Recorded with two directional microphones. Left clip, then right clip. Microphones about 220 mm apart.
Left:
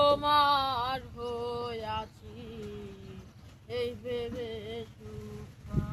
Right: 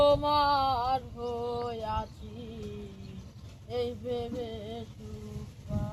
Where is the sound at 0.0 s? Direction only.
25° left (ahead or behind).